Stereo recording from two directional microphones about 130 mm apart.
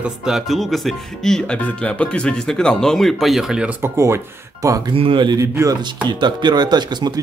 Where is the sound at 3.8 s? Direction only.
20° right (ahead or behind).